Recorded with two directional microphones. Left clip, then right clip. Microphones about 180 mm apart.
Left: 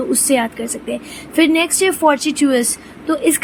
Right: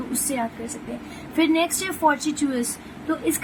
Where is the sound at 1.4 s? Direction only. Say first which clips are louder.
Left 7 dB; 30° left (ahead or behind).